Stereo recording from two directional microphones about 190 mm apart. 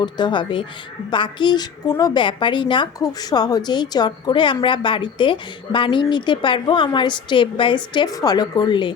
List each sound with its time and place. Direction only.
0.0 s a woman's voice: 25° left (ahead or behind)